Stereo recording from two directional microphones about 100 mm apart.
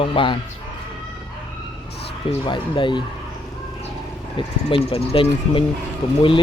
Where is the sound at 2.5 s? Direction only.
50° left (ahead or behind).